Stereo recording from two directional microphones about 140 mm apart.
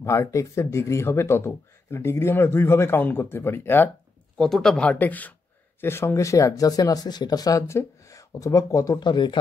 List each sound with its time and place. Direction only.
0.0 s speech: 20° left (ahead or behind)
4.4 s speech: 5° left (ahead or behind); by 9.4 s 35° left (ahead or behind)